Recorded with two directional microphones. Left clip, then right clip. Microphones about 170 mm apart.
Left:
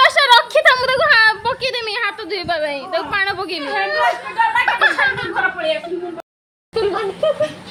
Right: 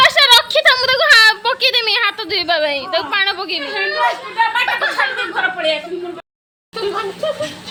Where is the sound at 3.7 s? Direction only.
40° left (ahead or behind).